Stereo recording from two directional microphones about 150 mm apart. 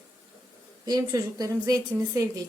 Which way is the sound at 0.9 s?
25° right (ahead or behind).